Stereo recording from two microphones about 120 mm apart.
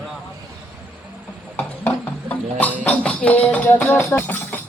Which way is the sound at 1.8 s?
15° left (ahead or behind).